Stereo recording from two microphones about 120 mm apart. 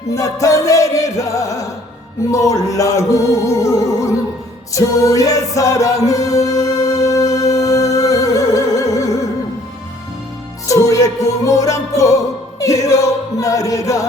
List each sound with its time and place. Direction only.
0.1 s choir: 25° left (ahead or behind)
7.3 s music: 30° left (ahead or behind)
10.7 s music: 25° left (ahead or behind)